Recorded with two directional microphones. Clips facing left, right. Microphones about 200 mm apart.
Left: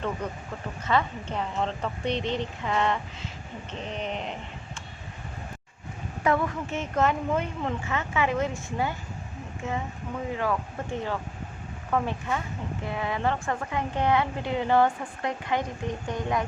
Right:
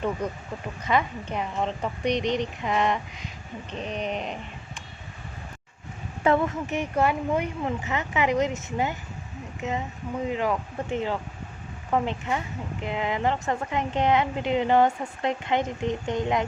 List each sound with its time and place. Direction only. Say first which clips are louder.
0.9 s a woman's voice: right 1 dB; 15° right (ahead or behind)
6.2 s a woman's voice: right 3 dB; 25° right (ahead or behind)
6.7 s a woman's voice: right 1 dB; 10° right (ahead or behind)